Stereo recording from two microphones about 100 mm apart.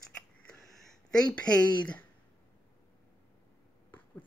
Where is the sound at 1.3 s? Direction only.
10° left (ahead or behind).